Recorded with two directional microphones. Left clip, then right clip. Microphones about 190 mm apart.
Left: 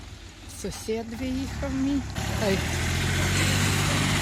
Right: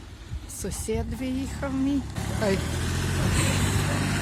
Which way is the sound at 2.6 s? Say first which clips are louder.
Left 3 dB; 15° left (ahead or behind).